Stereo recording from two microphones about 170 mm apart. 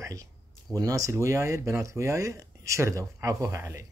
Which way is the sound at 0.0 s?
20° right (ahead or behind).